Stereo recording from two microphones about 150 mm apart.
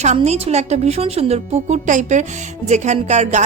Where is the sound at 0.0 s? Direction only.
45° right (ahead or behind).